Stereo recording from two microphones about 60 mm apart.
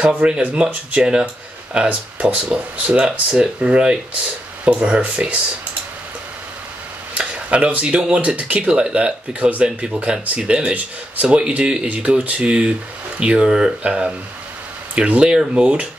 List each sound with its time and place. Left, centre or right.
0.2 s speech: centre
7.2 s speech: right